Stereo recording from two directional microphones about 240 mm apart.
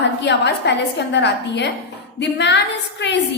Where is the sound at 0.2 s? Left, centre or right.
Left.